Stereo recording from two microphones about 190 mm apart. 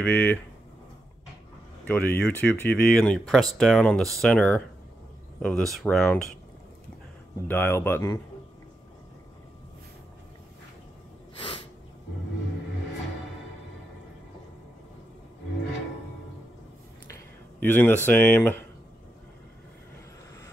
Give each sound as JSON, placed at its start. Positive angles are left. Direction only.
{"t": 0.0, "sound": "speech", "side_deg": 10}
{"t": 1.9, "sound": "speech", "side_deg": 10}
{"t": 7.4, "sound": "speech", "side_deg": 10}
{"t": 11.3, "sound": "snort", "side_deg": 30}
{"t": 17.1, "sound": "speech", "side_deg": 10}